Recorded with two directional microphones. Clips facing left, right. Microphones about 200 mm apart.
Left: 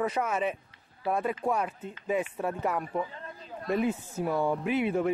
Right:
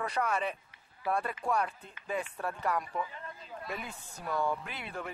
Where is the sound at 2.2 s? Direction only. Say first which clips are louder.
Left 5 dB; 15° left (ahead or behind).